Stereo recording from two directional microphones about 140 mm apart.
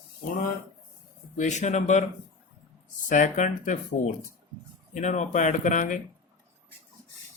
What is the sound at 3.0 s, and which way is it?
Speech, 65° left (ahead or behind).